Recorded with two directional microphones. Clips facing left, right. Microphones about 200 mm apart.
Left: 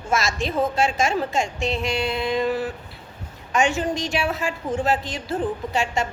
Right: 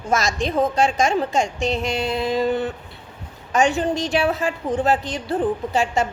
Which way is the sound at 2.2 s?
35° right (ahead or behind).